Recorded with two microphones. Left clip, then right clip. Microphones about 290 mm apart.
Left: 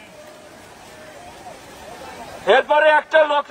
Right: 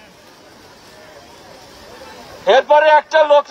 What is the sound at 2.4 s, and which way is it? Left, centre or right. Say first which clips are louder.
A man's voice: right 3 dB; right.